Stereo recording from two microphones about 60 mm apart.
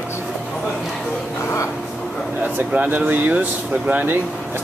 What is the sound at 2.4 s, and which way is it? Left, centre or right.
Speech, right.